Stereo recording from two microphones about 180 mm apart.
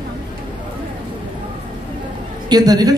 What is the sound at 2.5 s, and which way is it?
Speech, 20° right (ahead or behind).